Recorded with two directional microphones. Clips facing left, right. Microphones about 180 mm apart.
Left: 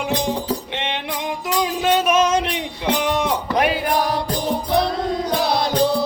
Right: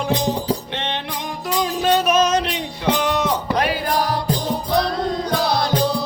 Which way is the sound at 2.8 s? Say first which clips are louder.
Right 1 dB; 20° left (ahead or behind).